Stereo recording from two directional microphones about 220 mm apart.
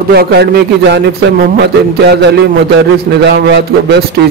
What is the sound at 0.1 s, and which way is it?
A man's voice, 45° right (ahead or behind).